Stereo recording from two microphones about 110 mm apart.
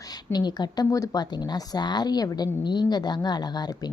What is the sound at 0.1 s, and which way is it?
A woman's voice, 35° left (ahead or behind).